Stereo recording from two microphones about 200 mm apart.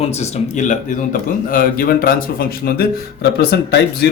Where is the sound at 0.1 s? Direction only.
35° left (ahead or behind).